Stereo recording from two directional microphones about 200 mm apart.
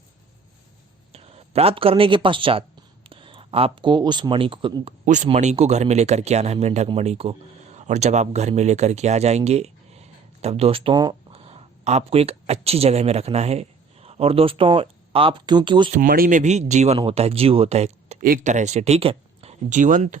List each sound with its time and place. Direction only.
1.1 s speech: 30° right (ahead or behind)
5.0 s speech: 35° right (ahead or behind)
15.9 s speech: 45° right (ahead or behind)